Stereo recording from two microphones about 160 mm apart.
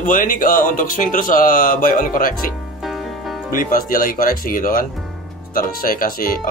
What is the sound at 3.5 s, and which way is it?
Speech, 60° left (ahead or behind).